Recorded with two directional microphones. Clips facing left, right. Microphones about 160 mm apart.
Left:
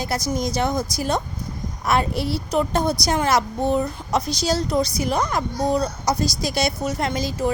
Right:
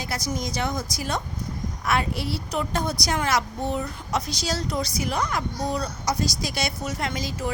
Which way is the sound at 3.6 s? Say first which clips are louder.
Left 7 dB; 40° left (ahead or behind).